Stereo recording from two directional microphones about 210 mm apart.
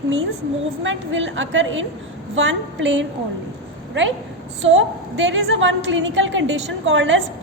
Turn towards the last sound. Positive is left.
turn(degrees=-65)  # may be behind; listen again after turning